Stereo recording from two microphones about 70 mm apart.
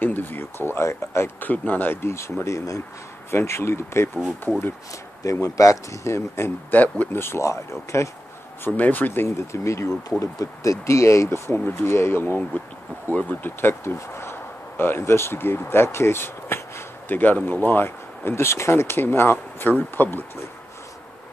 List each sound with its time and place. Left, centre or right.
0.0 s speech: left
1.4 s speech: left
3.3 s speech: left
4.2 s speech: centre
5.2 s speech: left
6.7 s speech: left
7.1 s speech: left
8.6 s speech: left
9.5 s speech: left